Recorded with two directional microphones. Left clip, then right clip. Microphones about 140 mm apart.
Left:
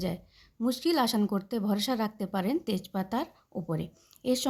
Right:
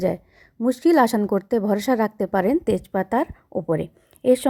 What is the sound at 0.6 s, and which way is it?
A woman's voice, 50° right (ahead or behind).